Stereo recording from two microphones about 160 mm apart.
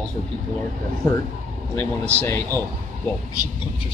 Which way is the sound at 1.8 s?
10° left (ahead or behind).